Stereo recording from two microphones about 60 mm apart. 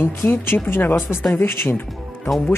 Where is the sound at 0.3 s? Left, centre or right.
Left.